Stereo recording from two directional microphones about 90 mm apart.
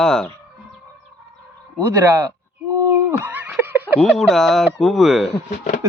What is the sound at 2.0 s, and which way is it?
Speech, 35° right (ahead or behind).